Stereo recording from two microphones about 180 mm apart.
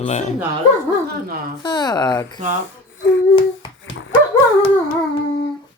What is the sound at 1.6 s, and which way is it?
Speech, 25° left (ahead or behind).